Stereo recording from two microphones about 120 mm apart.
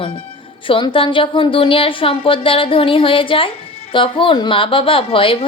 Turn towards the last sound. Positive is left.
turn(degrees=50)  # may be behind; listen again after turning